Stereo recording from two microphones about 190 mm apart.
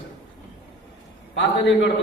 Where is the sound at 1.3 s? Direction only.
70° left (ahead or behind).